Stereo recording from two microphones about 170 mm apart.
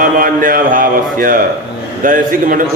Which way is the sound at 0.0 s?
55° right (ahead or behind).